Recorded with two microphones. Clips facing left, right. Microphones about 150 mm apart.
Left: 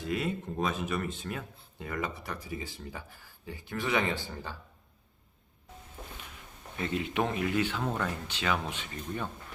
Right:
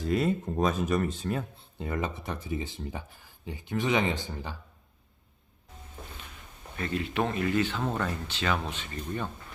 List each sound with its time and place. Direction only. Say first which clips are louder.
0.0 s speech: right 5 dB; 35° right (ahead or behind); by 4.5 s 20° right (ahead or behind)
6.7 s speech: right 1 dB; 20° left (ahead or behind)